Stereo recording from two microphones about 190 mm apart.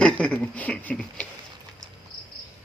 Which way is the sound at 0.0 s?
5° left (ahead or behind).